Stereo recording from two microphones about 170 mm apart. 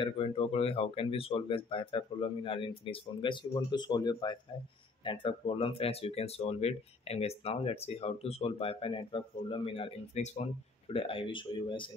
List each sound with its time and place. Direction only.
0.0 s speech: 35° left (ahead or behind)